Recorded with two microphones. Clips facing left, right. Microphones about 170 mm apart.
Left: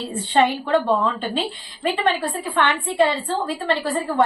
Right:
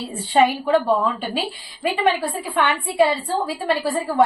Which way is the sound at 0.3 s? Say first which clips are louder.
Right 1 dB; centre (ahead or behind).